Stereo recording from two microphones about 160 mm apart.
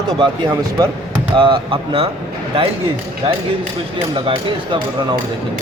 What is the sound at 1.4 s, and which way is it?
Speech, 30° right (ahead or behind).